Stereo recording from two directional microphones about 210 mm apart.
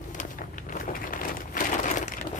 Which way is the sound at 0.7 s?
40° left (ahead or behind).